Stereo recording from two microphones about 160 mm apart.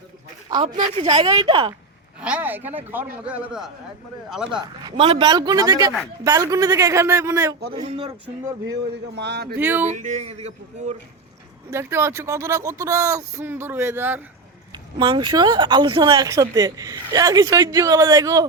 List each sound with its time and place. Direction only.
0.5 s speech: 30° right (ahead or behind)
2.2 s speech: 10° right (ahead or behind)
4.8 s speech: 25° right (ahead or behind)
7.9 s speech: 40° right (ahead or behind)
8.9 s a man's voice: 90° right
9.6 s speech: 15° right (ahead or behind)
9.8 s speech: 50° right (ahead or behind)
11.7 s speech: 15° right (ahead or behind)
14.9 s speech: 30° right (ahead or behind)